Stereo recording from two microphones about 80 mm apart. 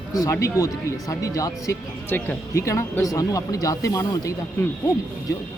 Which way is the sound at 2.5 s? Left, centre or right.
Left.